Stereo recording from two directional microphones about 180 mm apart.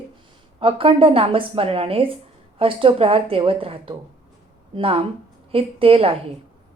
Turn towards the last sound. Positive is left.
turn(degrees=-30)  # may be behind; listen again after turning